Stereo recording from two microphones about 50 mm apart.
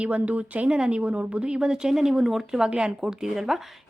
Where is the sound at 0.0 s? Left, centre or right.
Right.